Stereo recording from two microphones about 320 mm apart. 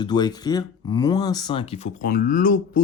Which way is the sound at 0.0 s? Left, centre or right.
Centre.